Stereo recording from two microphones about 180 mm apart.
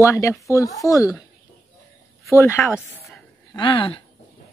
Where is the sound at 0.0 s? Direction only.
15° left (ahead or behind).